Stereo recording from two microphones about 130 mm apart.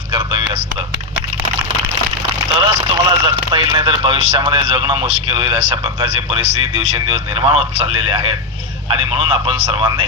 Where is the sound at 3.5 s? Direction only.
35° right (ahead or behind).